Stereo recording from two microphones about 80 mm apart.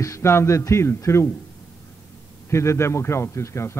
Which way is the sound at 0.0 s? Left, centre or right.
Left.